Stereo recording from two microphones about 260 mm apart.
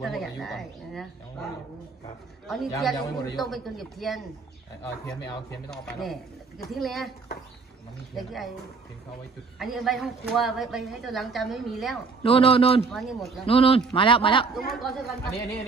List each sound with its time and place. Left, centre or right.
0.0 s a woman's voice: centre
2.4 s a woman's voice: centre
5.7 s a woman's voice: centre
8.2 s a woman's voice: centre
9.6 s a woman's voice: centre
12.2 s a man's voice: left
12.9 s a woman's voice: centre
13.5 s a man's voice: left
14.7 s a woman's voice: centre
15.2 s speech: centre